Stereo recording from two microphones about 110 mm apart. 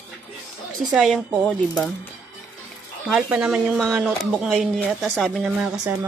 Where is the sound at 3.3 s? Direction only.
5° right (ahead or behind).